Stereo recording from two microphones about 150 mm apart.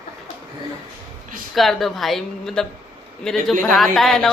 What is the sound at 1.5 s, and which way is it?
A woman's voice, centre (ahead or behind).